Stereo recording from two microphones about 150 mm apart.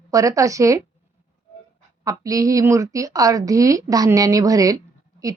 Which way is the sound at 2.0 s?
25° right (ahead or behind).